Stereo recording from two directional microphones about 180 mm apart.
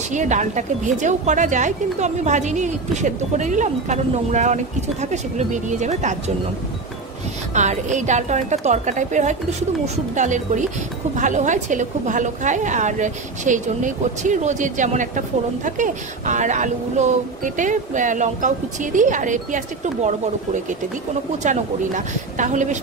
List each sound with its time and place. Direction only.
0.1 s a woman's voice: 40° right (ahead or behind)
7.5 s a woman's voice: 40° right (ahead or behind)
21.4 s a woman's voice: 45° right (ahead or behind)